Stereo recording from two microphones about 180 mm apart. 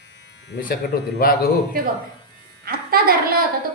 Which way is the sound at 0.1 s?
75° left (ahead or behind).